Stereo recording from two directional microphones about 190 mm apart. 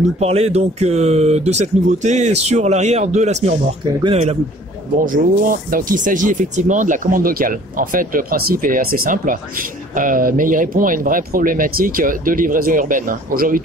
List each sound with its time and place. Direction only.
0.2 s speech: 35° right (ahead or behind)
5.0 s speech: 45° right (ahead or behind)